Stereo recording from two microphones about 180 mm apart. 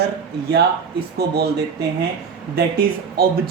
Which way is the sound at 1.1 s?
65° right (ahead or behind).